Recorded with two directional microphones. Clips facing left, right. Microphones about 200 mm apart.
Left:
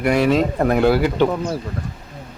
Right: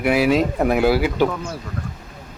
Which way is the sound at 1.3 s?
35° left (ahead or behind).